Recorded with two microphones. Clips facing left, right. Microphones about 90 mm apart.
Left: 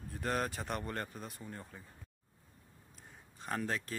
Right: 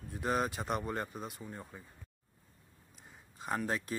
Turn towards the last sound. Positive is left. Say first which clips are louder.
# right 2 dB
turn(degrees=-15)  # may be behind; listen again after turning